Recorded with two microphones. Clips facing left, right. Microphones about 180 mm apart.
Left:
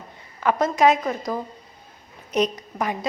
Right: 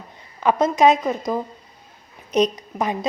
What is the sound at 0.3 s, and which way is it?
Speech, 20° right (ahead or behind).